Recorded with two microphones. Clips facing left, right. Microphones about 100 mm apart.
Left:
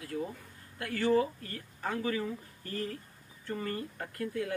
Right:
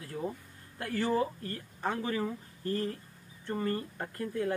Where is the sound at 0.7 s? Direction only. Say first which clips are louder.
Left 2 dB; 30° right (ahead or behind).